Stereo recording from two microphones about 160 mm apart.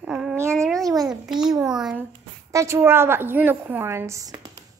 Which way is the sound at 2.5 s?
20° right (ahead or behind).